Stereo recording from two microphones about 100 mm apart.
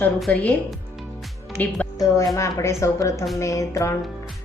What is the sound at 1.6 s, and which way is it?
Speech, 15° left (ahead or behind).